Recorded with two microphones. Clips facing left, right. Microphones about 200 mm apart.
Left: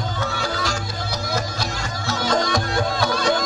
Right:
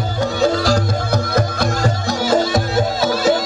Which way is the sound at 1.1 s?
55° right (ahead or behind).